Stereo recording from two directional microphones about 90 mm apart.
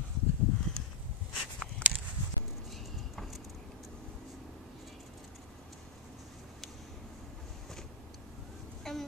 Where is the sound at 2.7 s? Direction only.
Centre (ahead or behind).